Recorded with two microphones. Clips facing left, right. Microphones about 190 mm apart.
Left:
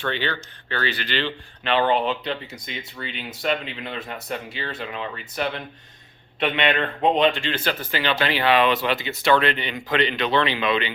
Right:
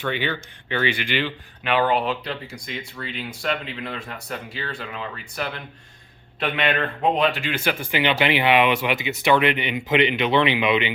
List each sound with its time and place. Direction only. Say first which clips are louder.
0.0 s speech: right 1 dB; 10° right (ahead or behind)